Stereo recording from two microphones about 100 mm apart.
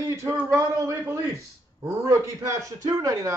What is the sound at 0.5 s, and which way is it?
A man's voice, 35° right (ahead or behind).